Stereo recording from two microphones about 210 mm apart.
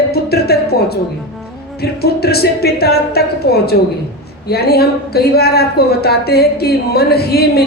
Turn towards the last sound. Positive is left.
turn(degrees=50)  # may be behind; listen again after turning